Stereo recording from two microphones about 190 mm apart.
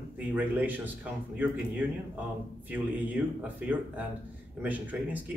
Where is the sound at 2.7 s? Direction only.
10° right (ahead or behind).